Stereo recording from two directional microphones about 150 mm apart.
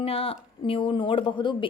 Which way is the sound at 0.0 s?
40° left (ahead or behind).